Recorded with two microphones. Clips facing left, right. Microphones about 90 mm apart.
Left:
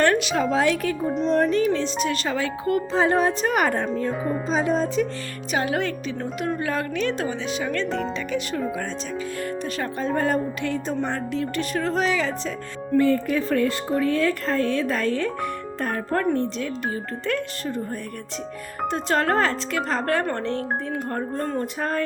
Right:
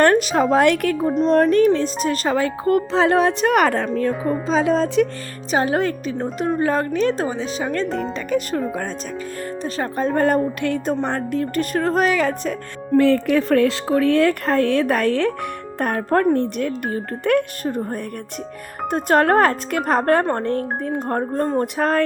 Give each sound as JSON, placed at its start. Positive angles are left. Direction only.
{"t": 0.0, "sound": "a woman's voice", "side_deg": -40}
{"t": 0.6, "sound": "speech", "side_deg": -65}
{"t": 1.2, "sound": "speech", "side_deg": -45}
{"t": 2.9, "sound": "speech", "side_deg": -85}
{"t": 4.1, "sound": "speech", "side_deg": 0}
{"t": 4.4, "sound": "speech", "side_deg": -90}
{"t": 5.5, "sound": "speech", "side_deg": -35}
{"t": 8.7, "sound": "speech", "side_deg": -50}
{"t": 10.0, "sound": "speech", "side_deg": -55}
{"t": 18.9, "sound": "speech", "side_deg": -50}
{"t": 21.6, "sound": "speech", "side_deg": -65}